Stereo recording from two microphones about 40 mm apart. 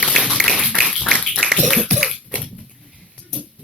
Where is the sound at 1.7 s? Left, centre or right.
Centre.